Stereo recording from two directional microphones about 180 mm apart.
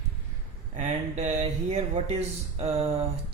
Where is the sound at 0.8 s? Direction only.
40° right (ahead or behind).